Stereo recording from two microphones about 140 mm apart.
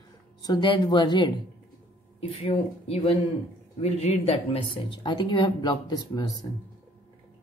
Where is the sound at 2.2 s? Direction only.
45° left (ahead or behind).